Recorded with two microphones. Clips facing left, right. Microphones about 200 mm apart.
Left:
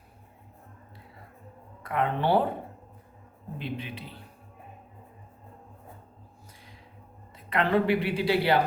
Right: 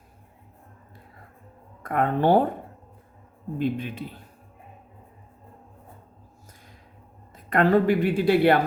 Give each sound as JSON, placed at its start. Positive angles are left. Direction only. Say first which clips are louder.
{"t": 1.8, "sound": "a woman's voice", "louder": "right 5 dB", "side_deg": -45}
{"t": 3.6, "sound": "a woman's voice", "louder": "right 9 dB", "side_deg": -45}
{"t": 7.3, "sound": "a woman's voice", "louder": "right 5 dB", "side_deg": -45}